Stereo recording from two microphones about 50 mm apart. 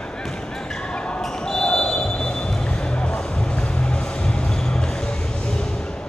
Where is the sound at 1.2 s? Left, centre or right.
Centre.